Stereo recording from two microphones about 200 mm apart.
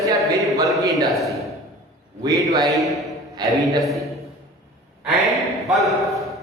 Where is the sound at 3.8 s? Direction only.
Centre (ahead or behind).